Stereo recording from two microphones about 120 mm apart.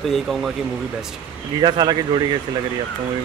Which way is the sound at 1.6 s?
35° right (ahead or behind).